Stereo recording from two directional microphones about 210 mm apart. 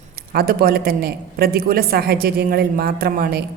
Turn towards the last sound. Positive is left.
turn(degrees=-45)  # may be behind; listen again after turning